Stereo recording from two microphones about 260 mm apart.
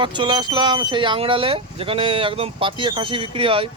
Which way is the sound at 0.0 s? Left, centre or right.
Centre.